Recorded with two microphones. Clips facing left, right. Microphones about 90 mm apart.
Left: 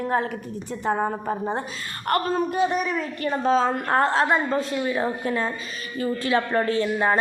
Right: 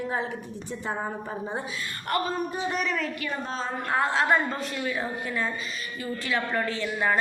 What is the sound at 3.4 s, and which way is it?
Speech, 70° left (ahead or behind).